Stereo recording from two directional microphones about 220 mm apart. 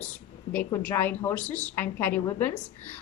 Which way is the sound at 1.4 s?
35° left (ahead or behind).